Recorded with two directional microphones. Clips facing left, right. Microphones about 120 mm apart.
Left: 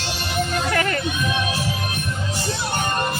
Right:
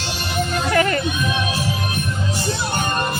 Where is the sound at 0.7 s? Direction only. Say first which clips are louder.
Right 4 dB; 15° right (ahead or behind).